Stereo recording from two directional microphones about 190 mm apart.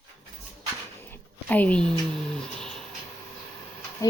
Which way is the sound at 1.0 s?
10° left (ahead or behind).